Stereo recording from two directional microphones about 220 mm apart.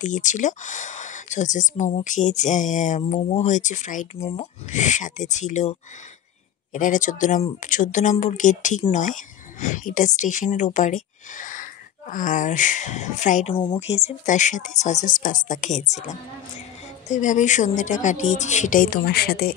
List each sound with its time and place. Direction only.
0.0 s speech: 35° left (ahead or behind)